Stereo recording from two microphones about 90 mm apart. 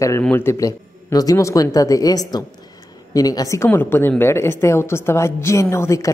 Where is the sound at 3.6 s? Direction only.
25° left (ahead or behind).